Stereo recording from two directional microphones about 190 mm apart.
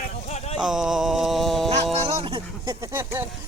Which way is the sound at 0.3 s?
35° left (ahead or behind).